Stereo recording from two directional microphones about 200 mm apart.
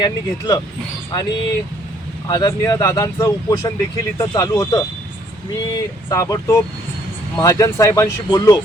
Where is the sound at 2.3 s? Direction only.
20° left (ahead or behind).